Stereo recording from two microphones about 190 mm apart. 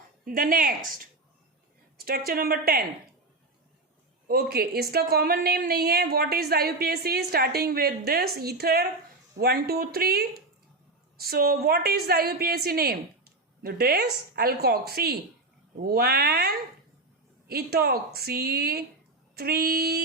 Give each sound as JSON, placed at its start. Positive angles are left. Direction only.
{"t": 0.3, "sound": "speech", "side_deg": -50}
{"t": 4.3, "sound": "a woman's voice", "side_deg": -55}